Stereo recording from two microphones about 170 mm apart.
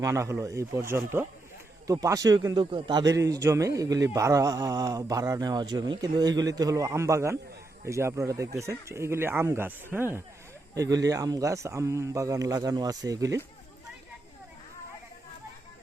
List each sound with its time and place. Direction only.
0.0 s a man's voice: 15° right (ahead or behind)